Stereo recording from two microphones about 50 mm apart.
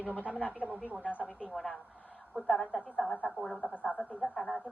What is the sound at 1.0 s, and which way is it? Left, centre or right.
Speech, left.